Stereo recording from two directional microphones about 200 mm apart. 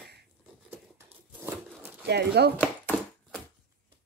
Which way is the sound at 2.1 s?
55° right (ahead or behind).